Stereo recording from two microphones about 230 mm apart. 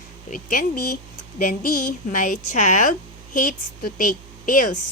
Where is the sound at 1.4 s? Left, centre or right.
Left.